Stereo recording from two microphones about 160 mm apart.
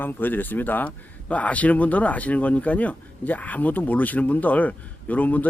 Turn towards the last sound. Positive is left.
turn(degrees=10)  # may be behind; listen again after turning